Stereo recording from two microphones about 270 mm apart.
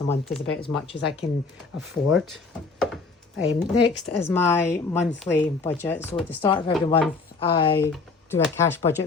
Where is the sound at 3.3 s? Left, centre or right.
Left.